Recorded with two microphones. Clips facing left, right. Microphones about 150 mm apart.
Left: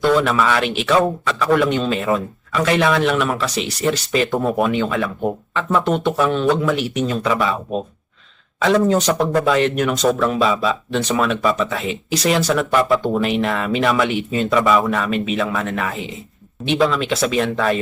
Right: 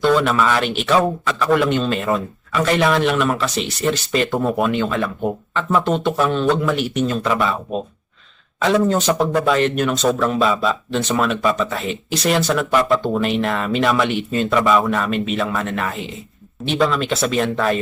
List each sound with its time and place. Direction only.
0.0 s speech: 5° left (ahead or behind)